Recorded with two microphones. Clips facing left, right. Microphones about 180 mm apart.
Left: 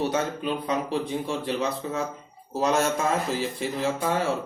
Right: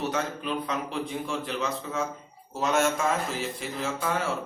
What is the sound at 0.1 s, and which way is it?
Speech, 35° left (ahead or behind).